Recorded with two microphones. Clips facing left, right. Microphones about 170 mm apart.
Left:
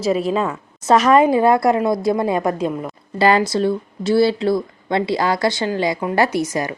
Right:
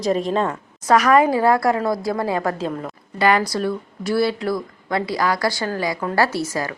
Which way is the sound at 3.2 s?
30° left (ahead or behind).